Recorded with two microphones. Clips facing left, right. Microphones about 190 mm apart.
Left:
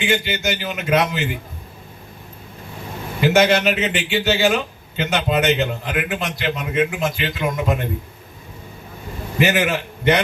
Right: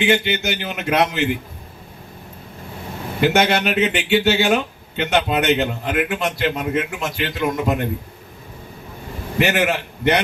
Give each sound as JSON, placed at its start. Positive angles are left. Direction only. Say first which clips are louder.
{"t": 0.0, "sound": "speech", "louder": "right 3 dB", "side_deg": -55}
{"t": 3.2, "sound": "speech", "louder": "left 2 dB", "side_deg": -55}
{"t": 9.4, "sound": "speech", "louder": "even", "side_deg": -60}